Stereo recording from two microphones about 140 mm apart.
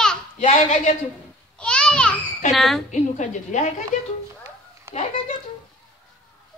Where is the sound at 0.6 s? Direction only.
60° left (ahead or behind).